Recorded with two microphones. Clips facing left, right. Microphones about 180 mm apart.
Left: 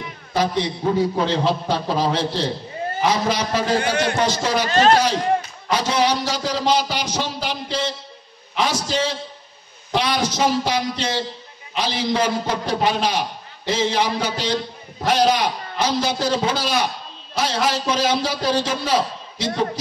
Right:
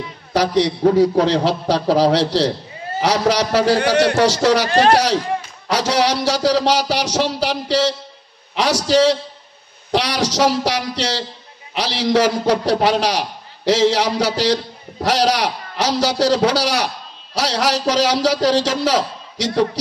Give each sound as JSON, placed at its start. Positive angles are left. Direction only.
{"t": 0.3, "sound": "a man's voice", "side_deg": -90}
{"t": 5.7, "sound": "a man's voice", "side_deg": -90}